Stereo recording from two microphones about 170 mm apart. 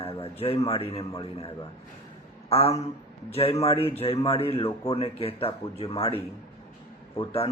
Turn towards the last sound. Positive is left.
turn(degrees=35)  # may be behind; listen again after turning